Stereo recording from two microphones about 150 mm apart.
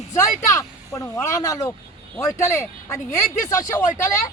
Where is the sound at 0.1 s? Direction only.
20° left (ahead or behind).